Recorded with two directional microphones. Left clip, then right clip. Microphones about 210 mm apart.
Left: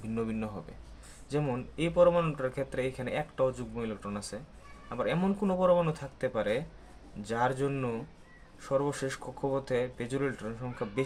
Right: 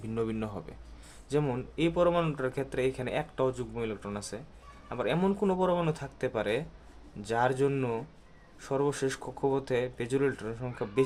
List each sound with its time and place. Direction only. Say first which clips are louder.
0.1 s speech: right 2 dB; 25° right (ahead or behind)